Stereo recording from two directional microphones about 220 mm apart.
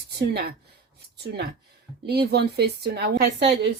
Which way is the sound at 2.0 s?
50° right (ahead or behind).